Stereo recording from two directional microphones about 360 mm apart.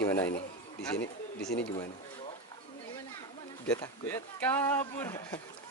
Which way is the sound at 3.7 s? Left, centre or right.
Centre.